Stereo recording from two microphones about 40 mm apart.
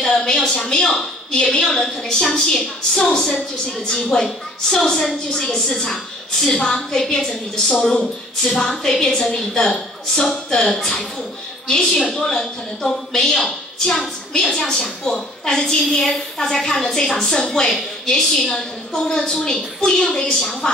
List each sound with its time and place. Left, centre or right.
0.1 s a sound: centre
0.5 s a woman's voice: centre
15.8 s a woman's voice: centre